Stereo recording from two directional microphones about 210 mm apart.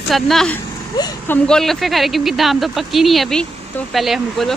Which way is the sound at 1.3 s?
5° left (ahead or behind).